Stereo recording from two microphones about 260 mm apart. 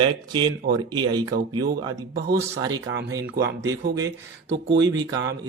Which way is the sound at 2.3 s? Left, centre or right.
Centre.